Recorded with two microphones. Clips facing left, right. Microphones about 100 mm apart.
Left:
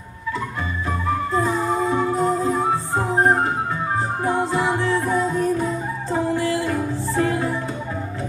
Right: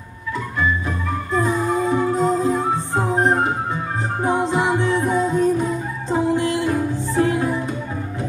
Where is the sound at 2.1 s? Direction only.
20° right (ahead or behind).